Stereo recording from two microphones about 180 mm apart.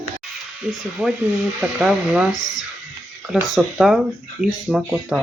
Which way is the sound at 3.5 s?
Centre (ahead or behind).